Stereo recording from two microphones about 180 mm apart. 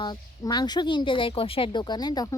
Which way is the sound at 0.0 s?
25° left (ahead or behind).